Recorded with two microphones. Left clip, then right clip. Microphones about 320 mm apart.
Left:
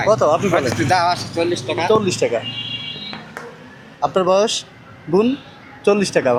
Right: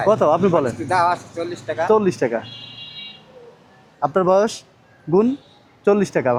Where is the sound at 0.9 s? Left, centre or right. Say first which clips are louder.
Left 1 dB; left.